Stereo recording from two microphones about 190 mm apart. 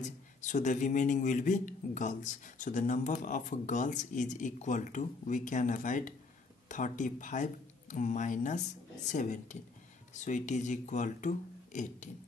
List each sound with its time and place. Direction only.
0.0 s a man's voice: 40° left (ahead or behind)